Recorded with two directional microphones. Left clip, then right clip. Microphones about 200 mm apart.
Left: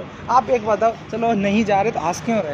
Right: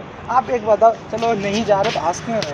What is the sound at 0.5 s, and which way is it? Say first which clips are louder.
Speech: right 4 dB; 30° left (ahead or behind).